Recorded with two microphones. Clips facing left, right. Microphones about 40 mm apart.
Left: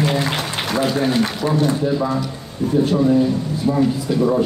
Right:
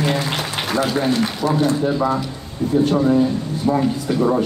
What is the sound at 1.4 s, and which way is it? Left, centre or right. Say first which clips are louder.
Speech: right 2 dB; right.